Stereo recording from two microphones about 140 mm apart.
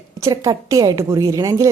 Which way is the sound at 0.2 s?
25° right (ahead or behind).